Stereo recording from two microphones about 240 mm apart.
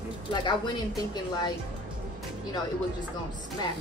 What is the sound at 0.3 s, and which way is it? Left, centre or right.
Speech, centre.